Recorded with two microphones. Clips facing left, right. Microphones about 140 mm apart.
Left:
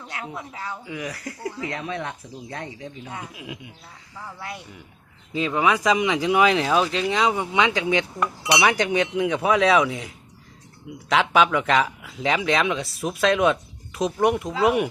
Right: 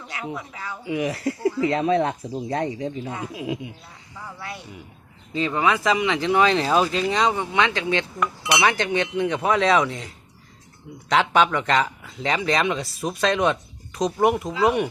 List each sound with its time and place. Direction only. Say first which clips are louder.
0.9 s speech: right 8 dB; 25° right (ahead or behind)
5.3 s speech: even; 5° left (ahead or behind)
7.3 s speech: left 1 dB; 15° left (ahead or behind)
11.1 s speech: even; centre (ahead or behind)